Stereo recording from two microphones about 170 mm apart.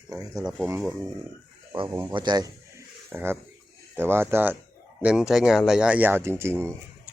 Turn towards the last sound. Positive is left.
turn(degrees=-15)  # may be behind; listen again after turning